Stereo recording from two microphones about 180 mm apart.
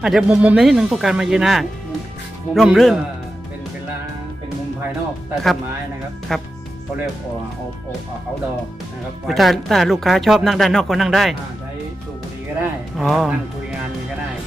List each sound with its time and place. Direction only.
0.0 s speech: 5° right (ahead or behind)
5.3 s speech: centre (ahead or behind)
9.2 s speech: centre (ahead or behind)
13.0 s speech: centre (ahead or behind)